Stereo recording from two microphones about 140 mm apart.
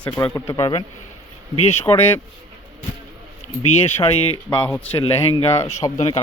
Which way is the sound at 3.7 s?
45° left (ahead or behind).